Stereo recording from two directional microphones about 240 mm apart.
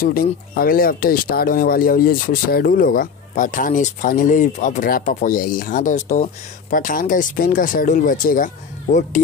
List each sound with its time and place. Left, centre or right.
0.0 s speech: left